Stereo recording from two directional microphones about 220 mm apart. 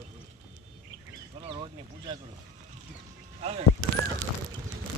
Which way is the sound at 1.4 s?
25° right (ahead or behind).